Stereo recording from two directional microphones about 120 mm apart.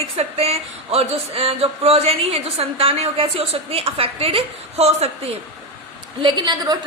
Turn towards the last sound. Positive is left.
turn(degrees=-35)  # may be behind; listen again after turning